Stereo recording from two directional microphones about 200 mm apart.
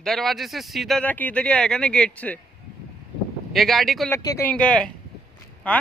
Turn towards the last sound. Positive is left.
turn(degrees=5)  # may be behind; listen again after turning